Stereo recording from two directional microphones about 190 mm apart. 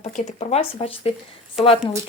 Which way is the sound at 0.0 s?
40° left (ahead or behind).